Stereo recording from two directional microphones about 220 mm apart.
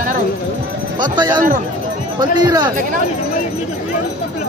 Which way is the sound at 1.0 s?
20° right (ahead or behind).